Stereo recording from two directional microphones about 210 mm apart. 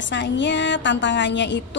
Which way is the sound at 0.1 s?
60° left (ahead or behind).